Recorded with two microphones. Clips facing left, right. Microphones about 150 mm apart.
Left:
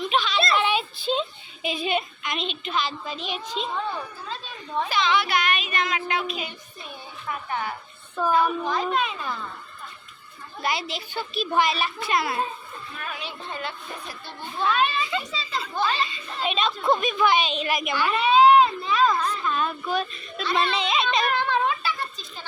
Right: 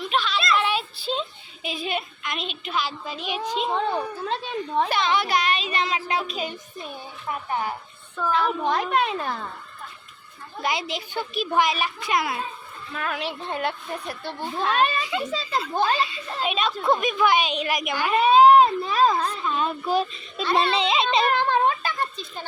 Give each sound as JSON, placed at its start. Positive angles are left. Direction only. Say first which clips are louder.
{"t": 0.0, "sound": "a sound", "louder": "left 1 dB", "side_deg": 0}
{"t": 1.6, "sound": "speech", "louder": "left 3 dB", "side_deg": 0}
{"t": 3.7, "sound": "a woman's voice", "louder": "right 5 dB", "side_deg": -80}
{"t": 8.3, "sound": "a child's voice", "louder": "even", "side_deg": -85}
{"t": 10.6, "sound": "speech", "louder": "right 1 dB", "side_deg": -15}
{"t": 12.9, "sound": "speech", "louder": "right 8 dB", "side_deg": -90}
{"t": 14.7, "sound": "a woman's voice", "louder": "right 1 dB", "side_deg": -40}
{"t": 16.0, "sound": "a child's voice", "louder": "right 2 dB", "side_deg": -5}
{"t": 17.9, "sound": "a sound", "louder": "right 3 dB", "side_deg": -45}
{"t": 19.1, "sound": "a woman's voice", "louder": "even", "side_deg": -30}
{"t": 21.3, "sound": "a sound", "louder": "right 3 dB", "side_deg": -45}